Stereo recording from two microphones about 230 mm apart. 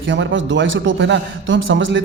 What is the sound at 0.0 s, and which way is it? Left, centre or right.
A man's voice, right.